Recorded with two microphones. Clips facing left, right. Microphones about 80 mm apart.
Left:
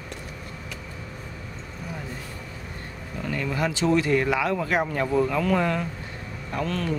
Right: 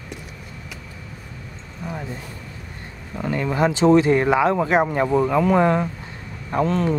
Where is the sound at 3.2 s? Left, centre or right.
Right.